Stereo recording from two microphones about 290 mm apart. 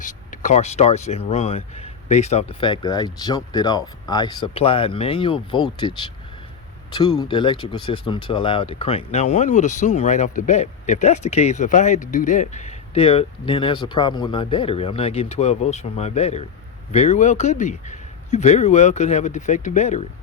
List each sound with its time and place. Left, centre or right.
0.0 s speech: left
6.9 s speech: centre